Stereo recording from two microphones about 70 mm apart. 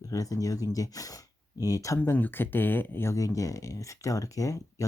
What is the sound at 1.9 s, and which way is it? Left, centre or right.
Speech, left.